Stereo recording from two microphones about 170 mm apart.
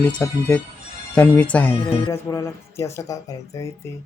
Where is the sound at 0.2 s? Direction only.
10° left (ahead or behind).